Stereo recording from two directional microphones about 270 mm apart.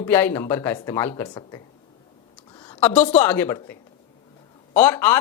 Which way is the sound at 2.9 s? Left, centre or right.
Left.